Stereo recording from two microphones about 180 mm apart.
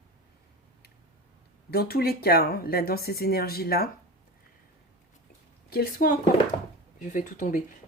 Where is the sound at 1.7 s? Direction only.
60° left (ahead or behind).